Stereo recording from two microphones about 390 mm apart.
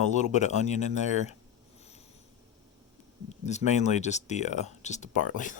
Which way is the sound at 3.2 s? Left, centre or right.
Centre.